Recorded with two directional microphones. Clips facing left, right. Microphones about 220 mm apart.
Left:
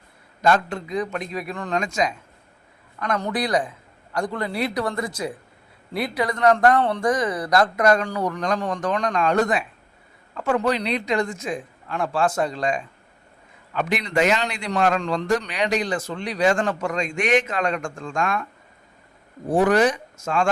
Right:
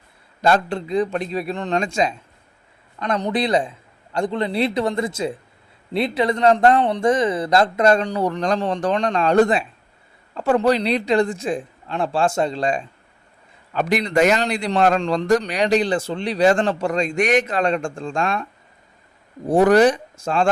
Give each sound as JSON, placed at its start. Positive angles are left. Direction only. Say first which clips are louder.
{"t": 0.4, "sound": "a man's voice", "louder": "right 2 dB", "side_deg": -30}
{"t": 19.5, "sound": "a man's voice", "louder": "right 4 dB", "side_deg": -40}